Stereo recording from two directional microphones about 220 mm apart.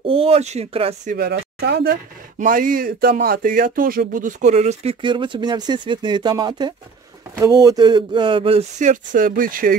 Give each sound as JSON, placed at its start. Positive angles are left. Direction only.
{"t": 0.0, "sound": "speech", "side_deg": -25}
{"t": 1.1, "sound": "speech", "side_deg": -45}